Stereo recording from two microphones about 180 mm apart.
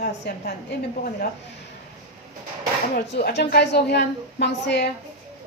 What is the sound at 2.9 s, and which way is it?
A woman's voice, 65° left (ahead or behind).